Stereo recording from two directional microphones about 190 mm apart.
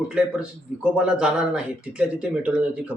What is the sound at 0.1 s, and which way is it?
Speech, 5° right (ahead or behind).